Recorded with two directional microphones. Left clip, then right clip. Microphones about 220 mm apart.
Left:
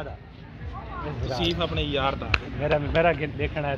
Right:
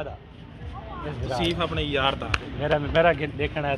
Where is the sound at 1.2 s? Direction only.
30° right (ahead or behind); by 2.2 s 10° right (ahead or behind).